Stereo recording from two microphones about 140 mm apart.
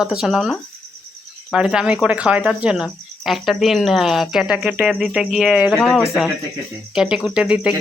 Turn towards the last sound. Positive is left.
turn(degrees=-5)  # may be behind; listen again after turning